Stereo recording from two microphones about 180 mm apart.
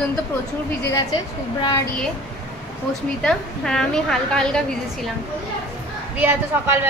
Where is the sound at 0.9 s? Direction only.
25° left (ahead or behind).